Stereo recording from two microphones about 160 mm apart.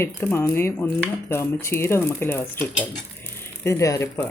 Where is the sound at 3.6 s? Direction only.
20° left (ahead or behind).